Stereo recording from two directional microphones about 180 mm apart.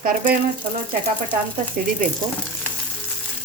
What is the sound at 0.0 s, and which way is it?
Speech, 50° right (ahead or behind).